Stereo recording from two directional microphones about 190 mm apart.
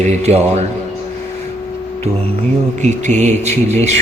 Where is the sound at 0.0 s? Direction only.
35° right (ahead or behind).